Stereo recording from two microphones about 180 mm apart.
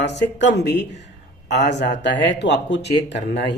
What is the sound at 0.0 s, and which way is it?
Speech, 75° left (ahead or behind).